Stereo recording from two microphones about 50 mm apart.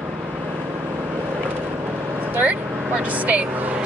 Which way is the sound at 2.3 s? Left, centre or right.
Right.